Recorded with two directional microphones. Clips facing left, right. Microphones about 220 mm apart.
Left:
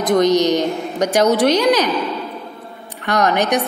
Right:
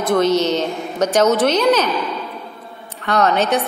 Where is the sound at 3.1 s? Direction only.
15° left (ahead or behind).